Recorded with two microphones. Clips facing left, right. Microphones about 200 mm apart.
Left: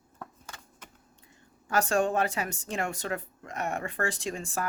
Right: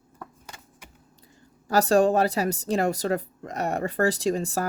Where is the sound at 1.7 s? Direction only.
35° right (ahead or behind).